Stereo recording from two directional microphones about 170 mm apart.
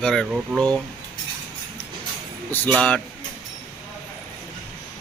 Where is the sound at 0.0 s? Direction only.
5° left (ahead or behind).